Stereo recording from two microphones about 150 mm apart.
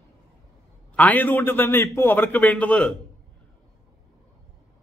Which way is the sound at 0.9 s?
10° left (ahead or behind).